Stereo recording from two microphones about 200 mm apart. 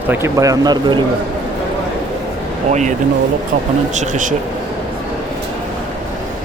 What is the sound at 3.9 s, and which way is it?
Speech, 35° right (ahead or behind).